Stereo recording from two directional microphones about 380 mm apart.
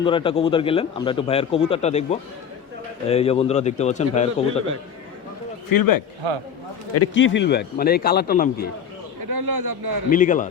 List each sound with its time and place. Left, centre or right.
0.0 s a man's voice: centre
5.7 s a man's voice: left
6.9 s a man's voice: left
9.2 s speech: right
10.1 s a man's voice: centre